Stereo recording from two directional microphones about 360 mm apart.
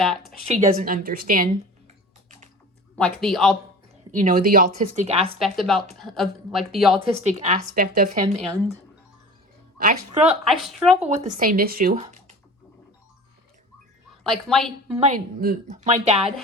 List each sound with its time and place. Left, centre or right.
0.0 s speech: centre
0.5 s a woman's voice: right
2.9 s speech: centre
4.1 s a woman's voice: right
5.4 s speech: centre
7.1 s a woman's voice: centre
9.7 s a woman's voice: right
10.4 s speech: centre
11.0 s a woman's voice: centre
14.3 s speech: centre
14.9 s a woman's voice: centre